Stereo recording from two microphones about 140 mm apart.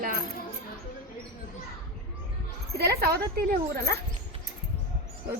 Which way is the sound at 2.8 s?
90° right.